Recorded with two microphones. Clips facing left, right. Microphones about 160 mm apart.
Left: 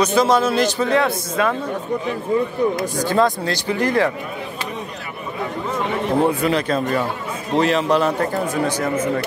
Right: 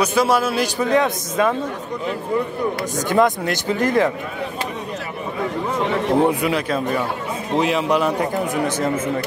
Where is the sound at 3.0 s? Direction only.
20° right (ahead or behind).